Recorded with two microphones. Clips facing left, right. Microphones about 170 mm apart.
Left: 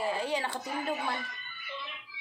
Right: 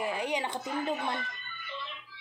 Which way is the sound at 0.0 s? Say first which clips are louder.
Even; 15° right (ahead or behind).